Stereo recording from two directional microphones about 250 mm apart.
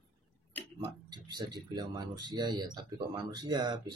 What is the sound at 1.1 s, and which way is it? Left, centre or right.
Speech, centre.